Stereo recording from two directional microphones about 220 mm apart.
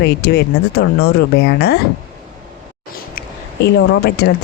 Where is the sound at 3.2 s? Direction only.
50° left (ahead or behind).